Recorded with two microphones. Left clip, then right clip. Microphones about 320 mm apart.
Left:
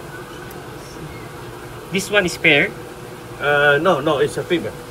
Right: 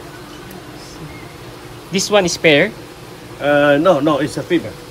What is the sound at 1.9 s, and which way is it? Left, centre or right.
Speech, centre.